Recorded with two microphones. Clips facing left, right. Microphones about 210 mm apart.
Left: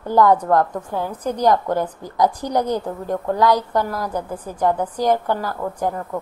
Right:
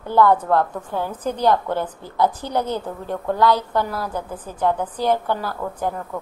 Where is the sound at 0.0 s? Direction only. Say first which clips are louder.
Left 1 dB; 15° left (ahead or behind).